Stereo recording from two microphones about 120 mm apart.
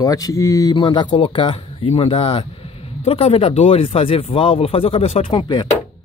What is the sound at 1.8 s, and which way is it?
Speech, 55° left (ahead or behind).